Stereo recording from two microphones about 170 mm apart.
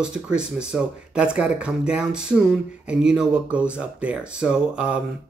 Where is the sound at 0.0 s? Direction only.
5° right (ahead or behind).